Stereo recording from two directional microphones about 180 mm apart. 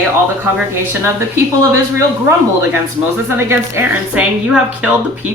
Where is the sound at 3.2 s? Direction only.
15° right (ahead or behind).